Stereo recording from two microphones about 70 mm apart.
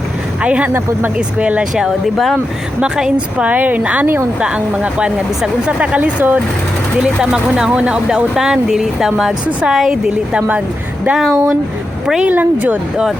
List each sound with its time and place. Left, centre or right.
0.4 s speech: centre
1.7 s speech: centre
2.8 s speech: centre
4.0 s speech: right
4.4 s speech: centre
7.0 s speech: centre
11.2 s speech: centre
12.0 s speech: centre
12.3 s speech: right